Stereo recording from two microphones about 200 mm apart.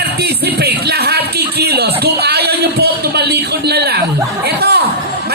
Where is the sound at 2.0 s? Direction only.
55° right (ahead or behind).